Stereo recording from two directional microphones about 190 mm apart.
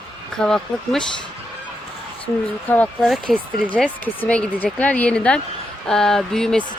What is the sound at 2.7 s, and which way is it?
Speech, 5° left (ahead or behind).